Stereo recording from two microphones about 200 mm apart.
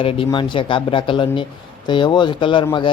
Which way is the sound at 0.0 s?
25° left (ahead or behind).